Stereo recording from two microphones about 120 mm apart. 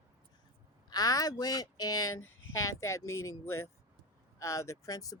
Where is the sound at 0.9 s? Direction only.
30° left (ahead or behind).